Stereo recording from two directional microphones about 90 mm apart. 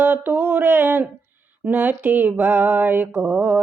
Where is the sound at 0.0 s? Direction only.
20° right (ahead or behind).